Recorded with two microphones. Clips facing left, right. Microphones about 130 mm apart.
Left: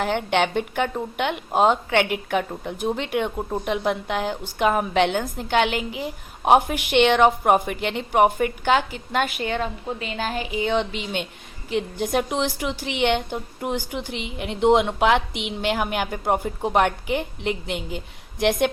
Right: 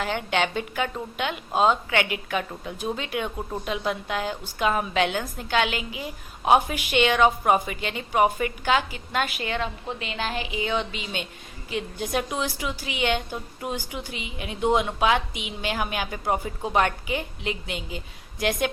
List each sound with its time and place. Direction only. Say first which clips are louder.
0.0 s a woman's voice: left 4 dB; 55° left (ahead or behind)
9.4 s speech: left 3 dB; 40° left (ahead or behind)
11.7 s a woman's voice: left 5 dB; 55° left (ahead or behind)